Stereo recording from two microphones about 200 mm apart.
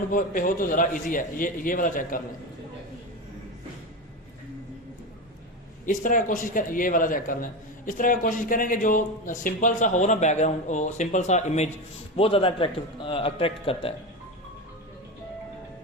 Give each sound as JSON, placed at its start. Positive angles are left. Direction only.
{"t": 0.1, "sound": "a man's voice", "side_deg": 45}
{"t": 5.8, "sound": "a man's voice", "side_deg": 40}